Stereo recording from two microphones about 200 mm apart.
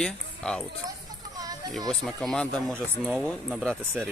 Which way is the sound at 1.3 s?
20° right (ahead or behind).